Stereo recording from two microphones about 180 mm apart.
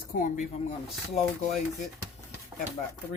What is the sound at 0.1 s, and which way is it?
Speech, 50° left (ahead or behind).